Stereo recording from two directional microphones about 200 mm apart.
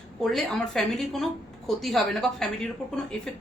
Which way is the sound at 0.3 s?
Centre (ahead or behind).